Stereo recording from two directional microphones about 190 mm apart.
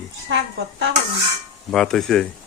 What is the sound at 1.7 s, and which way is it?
Speech, 5° left (ahead or behind).